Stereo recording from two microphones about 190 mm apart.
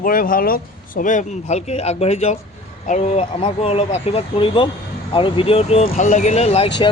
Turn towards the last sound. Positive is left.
turn(degrees=35)  # may be behind; listen again after turning